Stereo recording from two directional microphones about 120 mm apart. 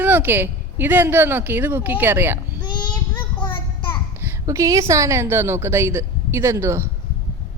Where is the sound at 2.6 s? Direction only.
35° left (ahead or behind).